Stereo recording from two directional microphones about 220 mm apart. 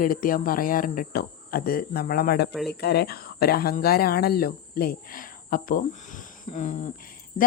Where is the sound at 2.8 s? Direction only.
45° left (ahead or behind).